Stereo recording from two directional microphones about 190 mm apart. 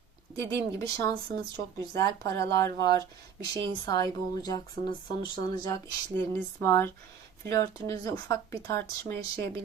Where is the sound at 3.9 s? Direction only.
20° left (ahead or behind).